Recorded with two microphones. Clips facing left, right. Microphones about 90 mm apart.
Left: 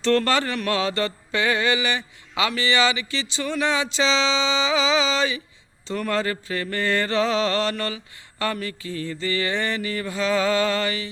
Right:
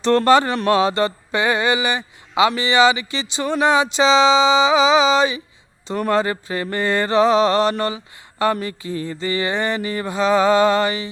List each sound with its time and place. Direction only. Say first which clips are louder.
0.3 s mantra: right 8 dB; 20° right (ahead or behind)